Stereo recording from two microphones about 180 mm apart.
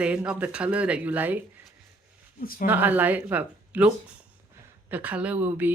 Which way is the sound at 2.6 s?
10° right (ahead or behind).